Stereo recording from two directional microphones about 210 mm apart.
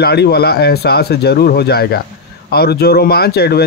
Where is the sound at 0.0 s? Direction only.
50° left (ahead or behind).